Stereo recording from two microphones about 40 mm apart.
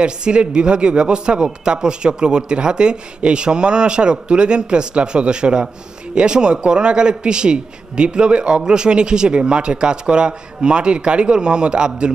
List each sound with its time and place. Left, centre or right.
0.0 s a man's voice: right